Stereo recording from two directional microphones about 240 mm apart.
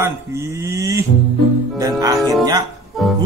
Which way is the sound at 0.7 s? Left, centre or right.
Centre.